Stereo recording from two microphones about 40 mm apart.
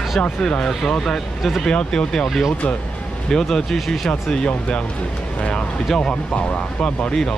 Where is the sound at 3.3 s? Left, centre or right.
Centre.